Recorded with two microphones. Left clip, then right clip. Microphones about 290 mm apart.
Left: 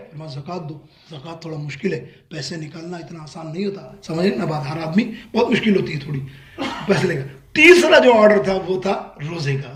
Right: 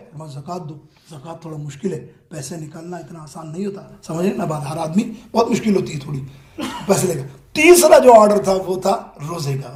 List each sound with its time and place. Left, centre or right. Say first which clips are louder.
0.2 s speech: right 1 dB; centre